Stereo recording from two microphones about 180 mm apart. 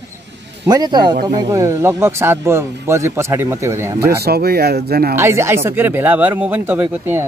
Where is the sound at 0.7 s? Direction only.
25° right (ahead or behind).